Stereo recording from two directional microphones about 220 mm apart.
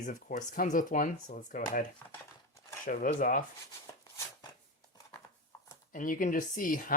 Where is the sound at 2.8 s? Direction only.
40° left (ahead or behind).